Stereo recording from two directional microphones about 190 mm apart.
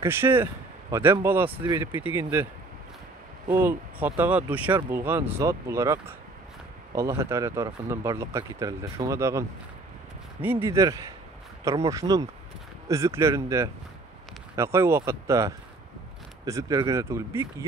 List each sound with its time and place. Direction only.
0.0 s speech: 10° right (ahead or behind)
3.4 s speech: 10° right (ahead or behind)